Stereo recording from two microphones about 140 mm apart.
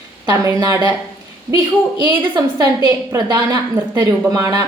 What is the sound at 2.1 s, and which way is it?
A woman's voice, 25° right (ahead or behind).